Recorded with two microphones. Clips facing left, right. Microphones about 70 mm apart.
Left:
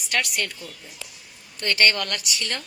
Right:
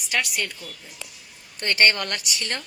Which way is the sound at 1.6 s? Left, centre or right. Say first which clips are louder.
Right 1 dB; right.